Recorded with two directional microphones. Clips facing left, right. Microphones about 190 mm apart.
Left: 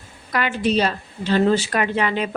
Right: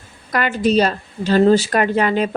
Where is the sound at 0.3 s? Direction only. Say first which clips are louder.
Right 4 dB; 45° right (ahead or behind).